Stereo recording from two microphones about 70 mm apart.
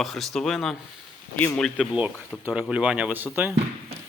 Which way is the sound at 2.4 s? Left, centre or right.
Centre.